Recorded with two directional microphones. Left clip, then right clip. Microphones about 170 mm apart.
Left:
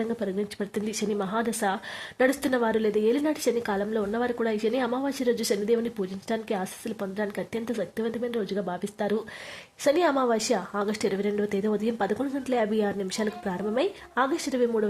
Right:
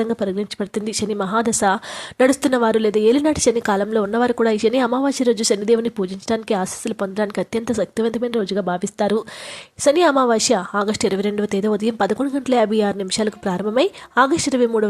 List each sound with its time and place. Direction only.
0.0 s speech: 35° right (ahead or behind)